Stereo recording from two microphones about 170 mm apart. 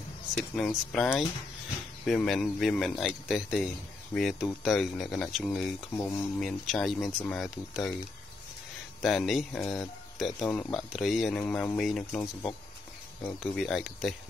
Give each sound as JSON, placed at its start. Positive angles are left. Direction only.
{"t": 0.3, "sound": "a man's voice", "side_deg": 0}
{"t": 9.0, "sound": "a man's voice", "side_deg": 0}
{"t": 13.2, "sound": "a man's voice", "side_deg": 0}